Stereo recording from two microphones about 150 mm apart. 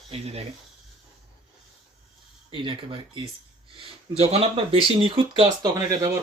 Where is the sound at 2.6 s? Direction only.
35° right (ahead or behind).